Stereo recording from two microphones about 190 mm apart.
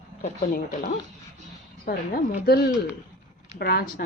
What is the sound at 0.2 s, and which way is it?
A woman's voice, 50° left (ahead or behind).